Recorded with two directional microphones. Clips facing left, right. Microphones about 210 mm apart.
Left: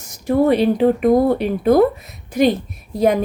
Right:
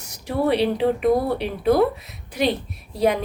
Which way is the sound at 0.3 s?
45° left (ahead or behind).